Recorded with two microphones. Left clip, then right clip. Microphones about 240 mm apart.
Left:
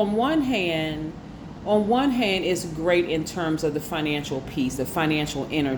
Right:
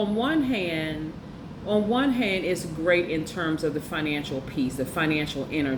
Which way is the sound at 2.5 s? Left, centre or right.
Left.